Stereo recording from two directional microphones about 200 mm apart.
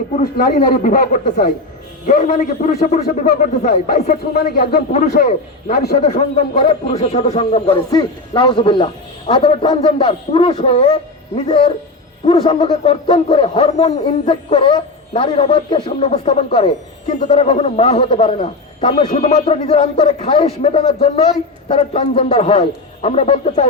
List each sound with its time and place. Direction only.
0.2 s a man's voice: 45° left (ahead or behind)